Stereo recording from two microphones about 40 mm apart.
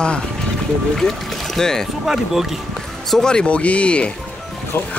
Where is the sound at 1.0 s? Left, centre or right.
Centre.